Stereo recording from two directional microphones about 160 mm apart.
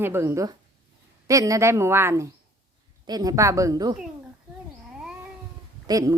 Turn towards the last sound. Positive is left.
turn(degrees=-20)  # may be behind; listen again after turning